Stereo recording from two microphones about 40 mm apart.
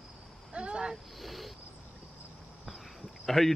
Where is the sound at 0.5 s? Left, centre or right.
Right.